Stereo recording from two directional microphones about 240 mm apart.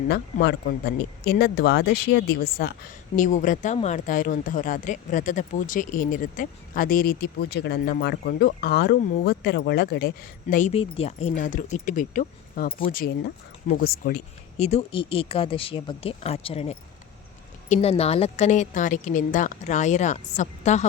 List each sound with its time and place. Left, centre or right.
0.1 s speech: left
10.5 s a woman's voice: left